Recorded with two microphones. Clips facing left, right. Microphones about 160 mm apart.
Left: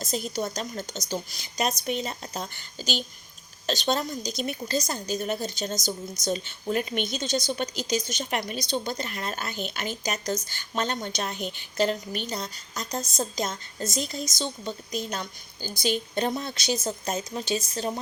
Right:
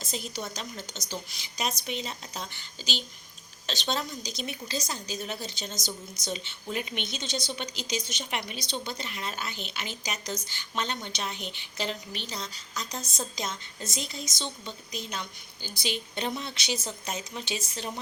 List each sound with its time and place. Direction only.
0.0 s a woman's voice: 45° left (ahead or behind)